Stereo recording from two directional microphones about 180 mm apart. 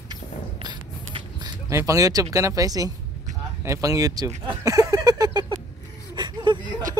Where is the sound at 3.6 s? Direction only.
15° right (ahead or behind).